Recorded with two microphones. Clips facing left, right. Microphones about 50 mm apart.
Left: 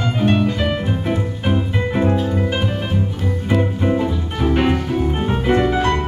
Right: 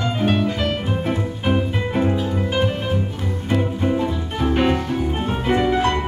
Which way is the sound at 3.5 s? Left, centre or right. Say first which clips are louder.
Left 2 dB; centre.